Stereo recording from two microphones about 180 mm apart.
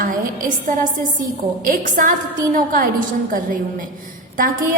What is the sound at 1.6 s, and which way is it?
A woman's voice, 50° right (ahead or behind).